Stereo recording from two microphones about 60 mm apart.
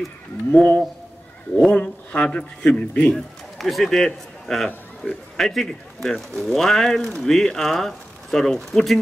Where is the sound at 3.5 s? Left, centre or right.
Centre.